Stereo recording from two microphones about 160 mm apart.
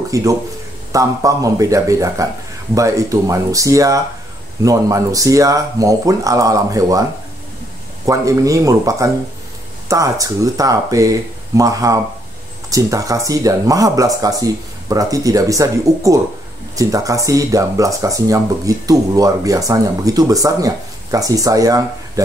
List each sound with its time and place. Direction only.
0.1 s speech: 20° right (ahead or behind)